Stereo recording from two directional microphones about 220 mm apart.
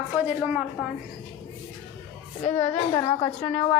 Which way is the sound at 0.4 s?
5° right (ahead or behind).